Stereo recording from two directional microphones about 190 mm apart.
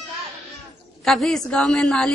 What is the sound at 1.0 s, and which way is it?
Speech, centre (ahead or behind).